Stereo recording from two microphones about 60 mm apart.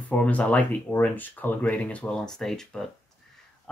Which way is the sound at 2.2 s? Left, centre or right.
Centre.